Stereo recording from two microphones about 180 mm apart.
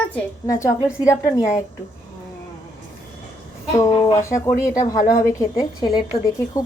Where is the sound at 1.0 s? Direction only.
20° left (ahead or behind).